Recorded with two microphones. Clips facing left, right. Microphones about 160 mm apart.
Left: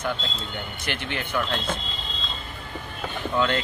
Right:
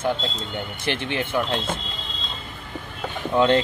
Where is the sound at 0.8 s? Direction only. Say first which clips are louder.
Right 6 dB; 25° right (ahead or behind).